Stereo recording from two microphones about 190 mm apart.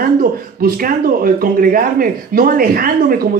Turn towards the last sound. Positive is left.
turn(degrees=-50)  # may be behind; listen again after turning